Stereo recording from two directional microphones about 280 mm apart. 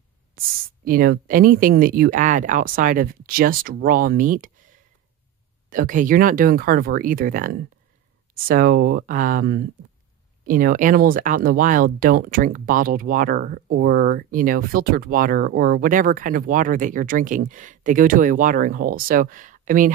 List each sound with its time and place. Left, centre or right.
0.4 s speech: right
5.7 s speech: right